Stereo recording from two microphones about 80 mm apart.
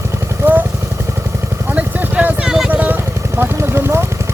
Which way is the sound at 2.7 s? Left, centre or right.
Centre.